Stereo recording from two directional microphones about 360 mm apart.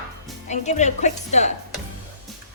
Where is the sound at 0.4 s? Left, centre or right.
Centre.